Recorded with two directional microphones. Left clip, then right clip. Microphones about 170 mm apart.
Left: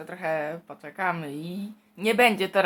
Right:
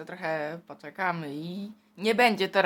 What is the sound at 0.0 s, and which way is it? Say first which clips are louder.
Speech: left 3 dB; 5° right (ahead or behind).